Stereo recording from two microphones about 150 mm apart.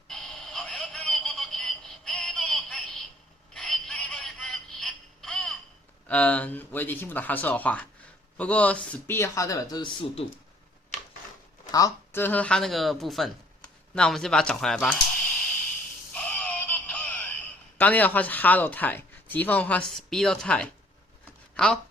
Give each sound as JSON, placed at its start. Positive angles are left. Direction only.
{"t": 0.1, "sound": "synthetic singing", "side_deg": 0}
{"t": 6.1, "sound": "speech", "side_deg": 10}
{"t": 11.7, "sound": "speech", "side_deg": 20}
{"t": 16.1, "sound": "synthetic singing", "side_deg": 10}
{"t": 17.7, "sound": "speech", "side_deg": 10}
{"t": 21.5, "sound": "a sound", "side_deg": 5}